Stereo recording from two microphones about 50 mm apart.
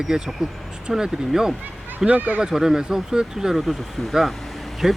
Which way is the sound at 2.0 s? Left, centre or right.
Right.